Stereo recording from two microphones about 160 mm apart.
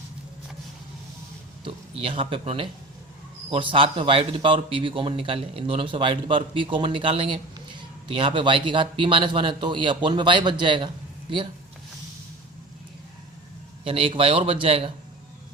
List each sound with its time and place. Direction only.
1.6 s a man's voice: 35° right (ahead or behind)
13.8 s a man's voice: 35° right (ahead or behind)